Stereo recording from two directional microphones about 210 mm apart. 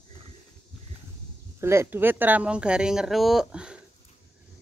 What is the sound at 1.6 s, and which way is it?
Speech, 10° right (ahead or behind).